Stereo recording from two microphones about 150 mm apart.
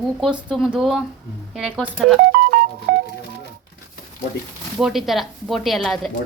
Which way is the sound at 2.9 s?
90° right.